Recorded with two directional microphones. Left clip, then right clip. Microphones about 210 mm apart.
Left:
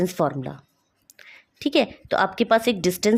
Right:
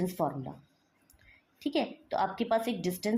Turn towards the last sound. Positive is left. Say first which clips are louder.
# left 12 dB
turn(degrees=50)  # may be behind; listen again after turning